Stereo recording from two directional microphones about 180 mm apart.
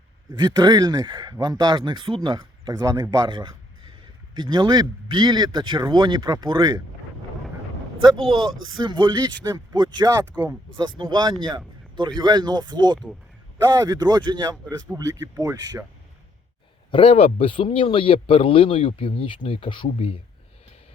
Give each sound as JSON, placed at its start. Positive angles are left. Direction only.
{"t": 0.3, "sound": "speech", "side_deg": -25}
{"t": 8.0, "sound": "speech", "side_deg": -25}
{"t": 10.3, "sound": "speech", "side_deg": -10}
{"t": 10.8, "sound": "speech", "side_deg": -25}
{"t": 16.9, "sound": "speech", "side_deg": 30}